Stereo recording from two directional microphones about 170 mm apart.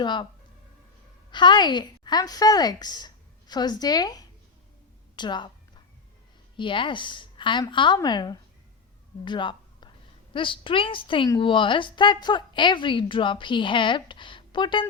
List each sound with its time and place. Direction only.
0.0 s speech: 25° left (ahead or behind)
1.3 s a woman's voice: 25° left (ahead or behind)
5.1 s a sound: 25° left (ahead or behind)
6.6 s speech: 30° left (ahead or behind)
9.2 s a sound: 25° left (ahead or behind)
10.3 s a woman's voice: 30° left (ahead or behind)